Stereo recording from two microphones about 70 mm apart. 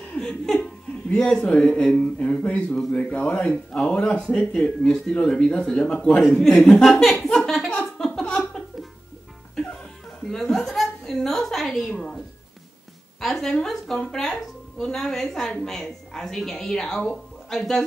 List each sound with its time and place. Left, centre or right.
0.1 s laughter: centre
1.1 s a woman's voice: centre
8.1 s a sound: centre
10.2 s a woman's voice: centre
13.2 s a woman's voice: centre